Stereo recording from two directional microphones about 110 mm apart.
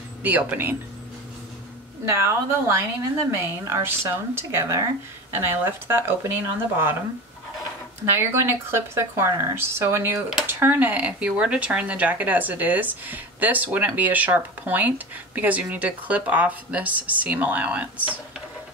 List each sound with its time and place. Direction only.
0.2 s speech: 15° right (ahead or behind)
2.0 s speech: 25° right (ahead or behind)
8.0 s speech: 20° right (ahead or behind)